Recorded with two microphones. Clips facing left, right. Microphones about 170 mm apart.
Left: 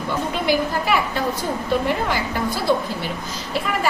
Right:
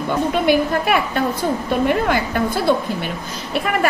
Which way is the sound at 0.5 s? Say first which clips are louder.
Right 2 dB; 55° right (ahead or behind).